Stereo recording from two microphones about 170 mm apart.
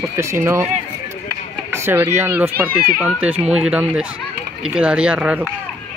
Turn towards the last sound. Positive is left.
turn(degrees=-5)  # may be behind; listen again after turning